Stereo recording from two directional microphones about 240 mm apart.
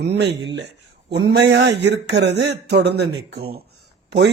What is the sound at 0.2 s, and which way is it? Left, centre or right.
A man's voice, right.